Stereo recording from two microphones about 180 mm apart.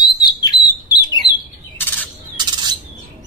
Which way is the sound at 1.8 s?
10° left (ahead or behind).